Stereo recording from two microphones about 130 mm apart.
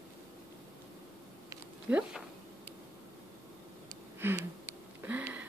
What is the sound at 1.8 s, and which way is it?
Speech, 10° right (ahead or behind).